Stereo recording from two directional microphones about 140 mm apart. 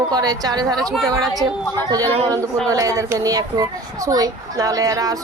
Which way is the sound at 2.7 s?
25° right (ahead or behind).